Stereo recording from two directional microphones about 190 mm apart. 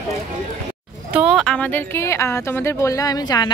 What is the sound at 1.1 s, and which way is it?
Speech, centre (ahead or behind).